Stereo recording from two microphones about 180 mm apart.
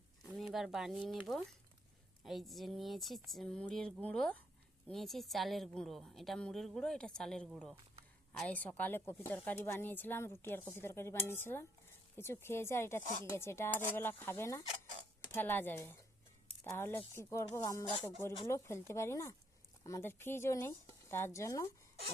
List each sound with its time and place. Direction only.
0.2 s a woman's voice: centre (ahead or behind); by 21.7 s 15° left (ahead or behind)